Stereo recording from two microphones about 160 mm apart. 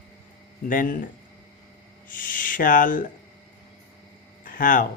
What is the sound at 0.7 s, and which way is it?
Speech, 60° left (ahead or behind).